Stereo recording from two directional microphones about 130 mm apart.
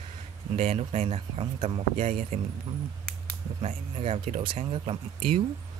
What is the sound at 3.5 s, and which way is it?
Speech, 50° right (ahead or behind).